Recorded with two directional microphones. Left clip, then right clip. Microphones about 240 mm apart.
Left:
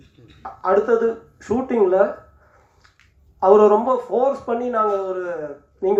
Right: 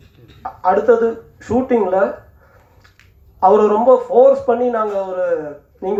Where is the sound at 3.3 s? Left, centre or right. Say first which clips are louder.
Right 1 dB; left.